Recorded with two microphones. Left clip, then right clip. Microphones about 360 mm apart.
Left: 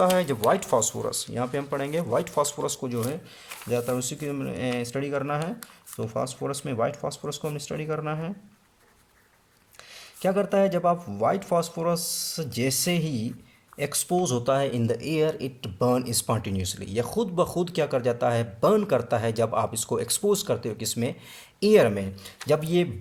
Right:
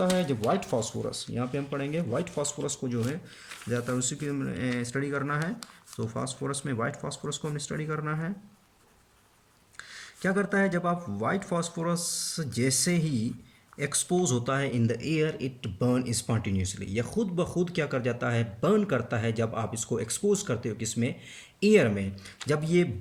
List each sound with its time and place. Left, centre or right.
0.0 s a man's voice: centre
9.9 s a man's voice: centre